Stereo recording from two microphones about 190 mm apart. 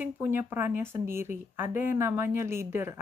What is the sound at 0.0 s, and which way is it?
A woman's voice, 10° right (ahead or behind).